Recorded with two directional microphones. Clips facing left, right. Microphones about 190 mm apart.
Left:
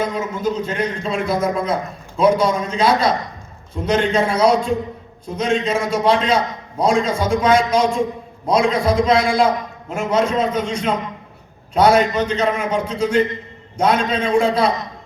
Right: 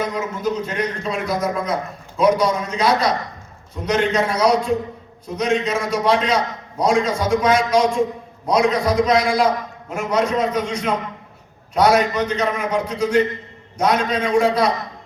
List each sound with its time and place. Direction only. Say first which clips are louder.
0.0 s a man's voice: left 2 dB; 30° left (ahead or behind)